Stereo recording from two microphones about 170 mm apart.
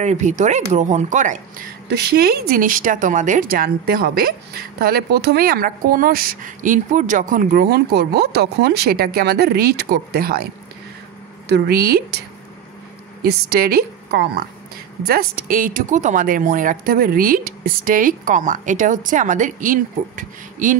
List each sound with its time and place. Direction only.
0.0 s speech: 45° right (ahead or behind)
1.9 s a woman's voice: 75° right (ahead or behind)
13.2 s a woman's voice: 70° right (ahead or behind); by 20.7 s 50° right (ahead or behind)